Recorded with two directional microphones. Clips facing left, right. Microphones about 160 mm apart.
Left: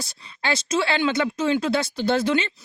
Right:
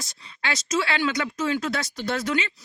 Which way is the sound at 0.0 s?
30° left (ahead or behind).